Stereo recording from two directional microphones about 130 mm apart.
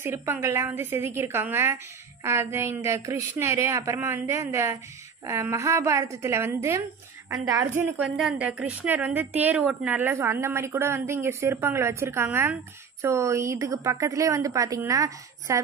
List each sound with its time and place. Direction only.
0.0 s a woman's voice: 20° right (ahead or behind)
8.0 s a woman's voice: 5° right (ahead or behind); by 15.6 s 25° right (ahead or behind)